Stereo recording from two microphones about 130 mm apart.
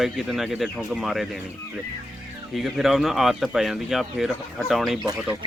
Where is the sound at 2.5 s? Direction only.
Centre (ahead or behind).